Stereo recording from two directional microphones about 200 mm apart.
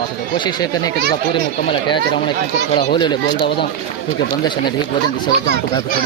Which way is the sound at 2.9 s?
20° left (ahead or behind).